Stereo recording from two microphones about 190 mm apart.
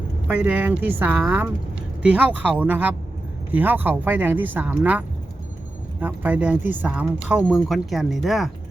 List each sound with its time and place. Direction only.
0.3 s speech: 10° right (ahead or behind)